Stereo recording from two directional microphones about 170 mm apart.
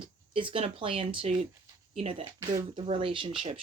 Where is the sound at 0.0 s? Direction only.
30° right (ahead or behind).